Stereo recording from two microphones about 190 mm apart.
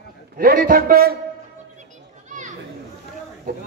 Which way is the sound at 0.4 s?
50° right (ahead or behind).